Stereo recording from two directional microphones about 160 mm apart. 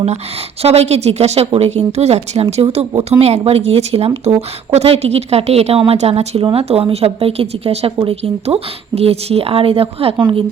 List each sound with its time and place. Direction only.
0.6 s speech: 40° right (ahead or behind)